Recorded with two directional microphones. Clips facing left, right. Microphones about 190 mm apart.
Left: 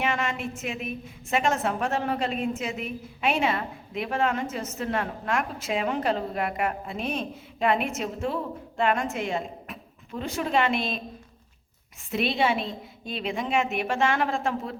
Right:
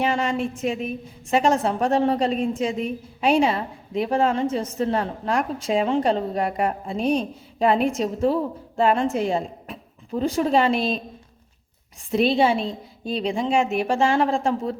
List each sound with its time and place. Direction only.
0.0 s a woman's voice: 35° right (ahead or behind)
12.1 s a woman's voice: 30° right (ahead or behind)